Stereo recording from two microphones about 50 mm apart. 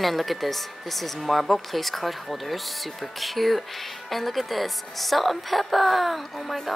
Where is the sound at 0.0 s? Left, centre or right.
Centre.